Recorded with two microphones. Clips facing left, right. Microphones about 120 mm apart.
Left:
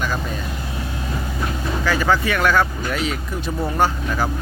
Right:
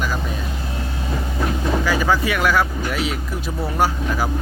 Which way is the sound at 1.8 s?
10° right (ahead or behind).